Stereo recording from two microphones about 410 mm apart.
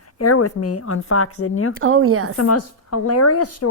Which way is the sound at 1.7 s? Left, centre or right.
Right.